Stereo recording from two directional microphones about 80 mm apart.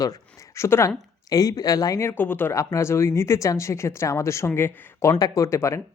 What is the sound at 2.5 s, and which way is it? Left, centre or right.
Speech, left.